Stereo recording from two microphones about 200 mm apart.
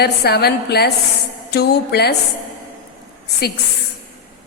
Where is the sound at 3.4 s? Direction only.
50° left (ahead or behind).